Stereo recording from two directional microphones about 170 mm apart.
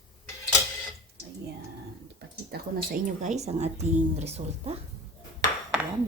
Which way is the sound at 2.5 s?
60° right (ahead or behind).